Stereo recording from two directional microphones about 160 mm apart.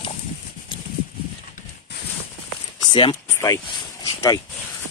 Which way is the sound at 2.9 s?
30° left (ahead or behind).